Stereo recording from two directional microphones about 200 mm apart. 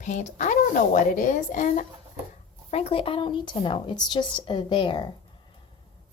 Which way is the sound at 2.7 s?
30° left (ahead or behind).